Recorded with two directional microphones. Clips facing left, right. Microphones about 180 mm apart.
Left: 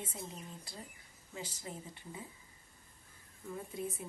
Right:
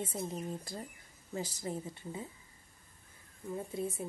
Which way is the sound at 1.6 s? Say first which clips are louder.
Right 7 dB; 30° right (ahead or behind).